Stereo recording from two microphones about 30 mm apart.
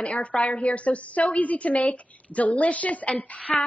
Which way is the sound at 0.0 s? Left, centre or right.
Left.